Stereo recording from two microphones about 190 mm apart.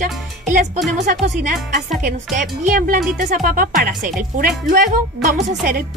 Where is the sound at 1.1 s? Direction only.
45° right (ahead or behind).